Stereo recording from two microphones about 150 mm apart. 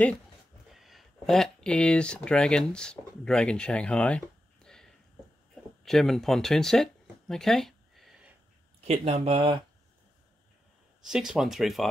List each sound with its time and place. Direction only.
0.7 s speech: centre (ahead or behind)
5.9 s speech: centre (ahead or behind)
8.8 s speech: 45° right (ahead or behind)
11.0 s speech: 5° right (ahead or behind)